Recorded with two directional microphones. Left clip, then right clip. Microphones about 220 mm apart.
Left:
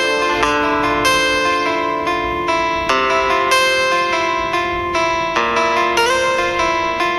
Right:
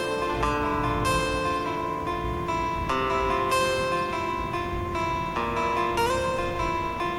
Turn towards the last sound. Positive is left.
turn(degrees=25)  # may be behind; listen again after turning